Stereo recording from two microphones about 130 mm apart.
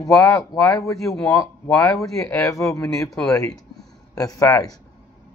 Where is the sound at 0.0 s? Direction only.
25° left (ahead or behind).